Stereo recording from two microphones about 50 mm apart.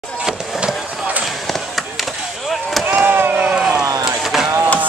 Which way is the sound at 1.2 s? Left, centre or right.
Centre.